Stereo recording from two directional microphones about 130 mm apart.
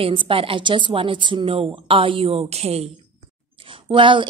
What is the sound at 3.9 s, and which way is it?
Speech, 40° right (ahead or behind).